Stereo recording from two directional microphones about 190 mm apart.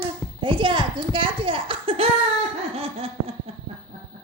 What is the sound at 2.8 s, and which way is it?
Laughter, 30° right (ahead or behind).